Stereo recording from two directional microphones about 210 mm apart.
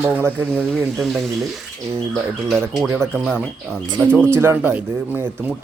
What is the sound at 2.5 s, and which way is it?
Speech, 10° right (ahead or behind).